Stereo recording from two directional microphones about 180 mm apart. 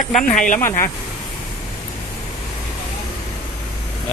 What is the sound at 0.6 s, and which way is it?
Speech, 15° left (ahead or behind).